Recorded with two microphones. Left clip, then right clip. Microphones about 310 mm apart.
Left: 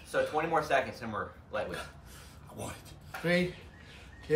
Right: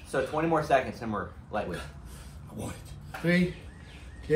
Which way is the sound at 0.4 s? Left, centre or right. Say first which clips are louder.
Right 5 dB; centre.